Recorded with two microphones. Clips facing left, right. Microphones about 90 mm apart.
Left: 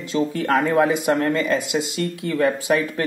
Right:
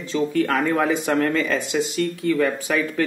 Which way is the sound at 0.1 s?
25° left (ahead or behind).